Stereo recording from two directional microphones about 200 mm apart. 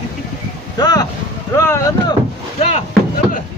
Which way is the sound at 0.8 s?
20° left (ahead or behind).